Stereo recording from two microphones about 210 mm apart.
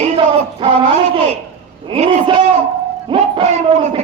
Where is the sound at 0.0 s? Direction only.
25° right (ahead or behind).